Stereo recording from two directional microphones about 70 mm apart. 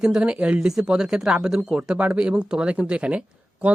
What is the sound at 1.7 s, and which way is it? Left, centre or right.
Speech, centre.